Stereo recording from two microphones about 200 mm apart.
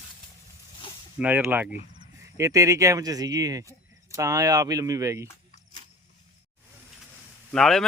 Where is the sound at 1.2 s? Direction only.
10° right (ahead or behind).